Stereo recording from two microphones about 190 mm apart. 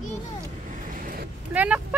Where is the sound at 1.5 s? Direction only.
5° right (ahead or behind).